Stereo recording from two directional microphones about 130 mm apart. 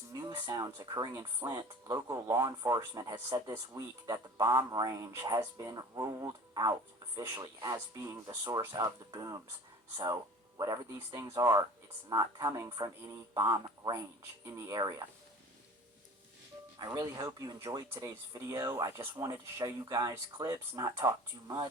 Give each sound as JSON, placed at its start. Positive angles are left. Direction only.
{"t": 0.1, "sound": "speech", "side_deg": -30}
{"t": 10.6, "sound": "speech", "side_deg": -25}
{"t": 16.7, "sound": "speech", "side_deg": -30}